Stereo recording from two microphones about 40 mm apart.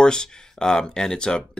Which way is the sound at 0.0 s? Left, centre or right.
Centre.